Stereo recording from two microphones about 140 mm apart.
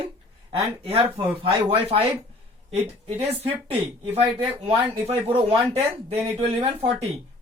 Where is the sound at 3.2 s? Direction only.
50° right (ahead or behind).